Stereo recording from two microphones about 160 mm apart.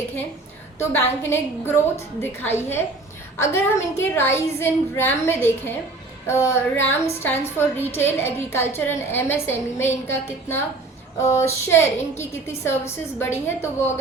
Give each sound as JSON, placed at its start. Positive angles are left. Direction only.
{"t": 0.8, "sound": "a woman's voice", "side_deg": 15}